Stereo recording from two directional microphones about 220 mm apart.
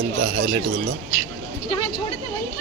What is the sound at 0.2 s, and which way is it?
Speech, 50° right (ahead or behind).